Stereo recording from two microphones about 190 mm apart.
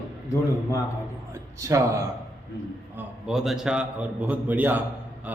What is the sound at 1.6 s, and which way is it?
Speech, 15° right (ahead or behind).